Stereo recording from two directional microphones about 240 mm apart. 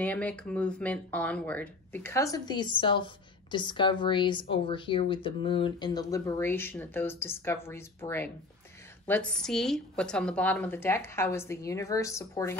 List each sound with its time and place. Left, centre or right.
0.0 s a woman's voice: centre